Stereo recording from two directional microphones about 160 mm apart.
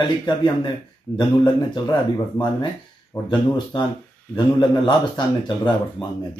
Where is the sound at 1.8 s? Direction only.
20° left (ahead or behind).